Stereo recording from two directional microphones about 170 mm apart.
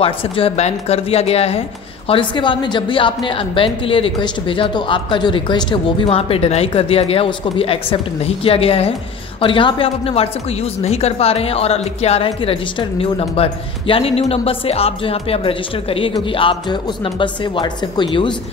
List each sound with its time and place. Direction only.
0.0 s a woman's voice: 35° left (ahead or behind)